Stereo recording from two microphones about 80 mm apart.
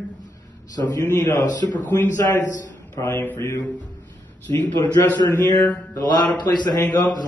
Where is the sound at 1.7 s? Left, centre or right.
Left.